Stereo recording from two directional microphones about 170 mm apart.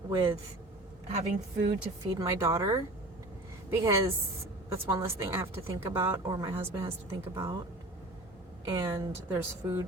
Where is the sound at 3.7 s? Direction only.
15° right (ahead or behind).